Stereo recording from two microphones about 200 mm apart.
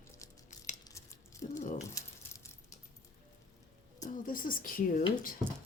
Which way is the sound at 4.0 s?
45° left (ahead or behind).